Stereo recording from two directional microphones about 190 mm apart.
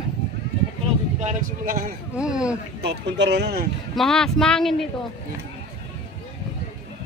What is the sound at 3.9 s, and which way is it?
Speech, centre (ahead or behind).